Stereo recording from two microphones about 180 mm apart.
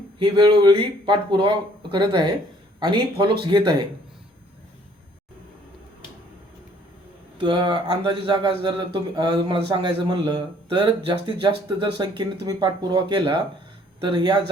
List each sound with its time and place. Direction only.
0.2 s speech: 25° right (ahead or behind)
7.3 s speech: 25° right (ahead or behind)